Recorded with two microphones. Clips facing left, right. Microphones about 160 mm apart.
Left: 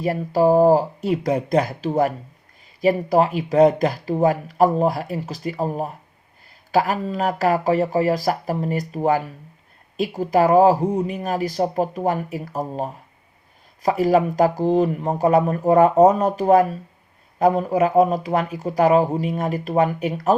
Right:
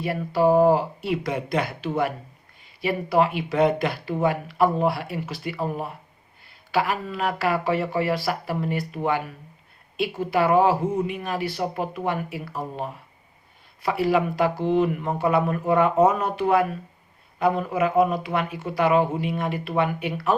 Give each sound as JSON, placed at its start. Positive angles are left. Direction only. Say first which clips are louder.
{"t": 0.0, "sound": "speech", "louder": "left 3 dB", "side_deg": 40}